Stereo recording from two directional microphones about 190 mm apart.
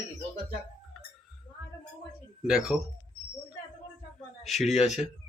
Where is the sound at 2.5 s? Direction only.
5° right (ahead or behind).